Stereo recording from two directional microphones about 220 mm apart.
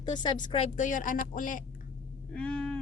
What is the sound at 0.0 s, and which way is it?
A woman's voice, 20° left (ahead or behind).